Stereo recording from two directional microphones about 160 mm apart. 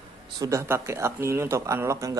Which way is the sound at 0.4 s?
20° right (ahead or behind).